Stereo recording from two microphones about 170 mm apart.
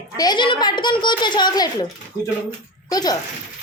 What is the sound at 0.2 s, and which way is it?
A child's voice, 25° left (ahead or behind).